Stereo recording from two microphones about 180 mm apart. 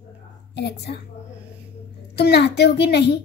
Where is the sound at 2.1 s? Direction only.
65° left (ahead or behind).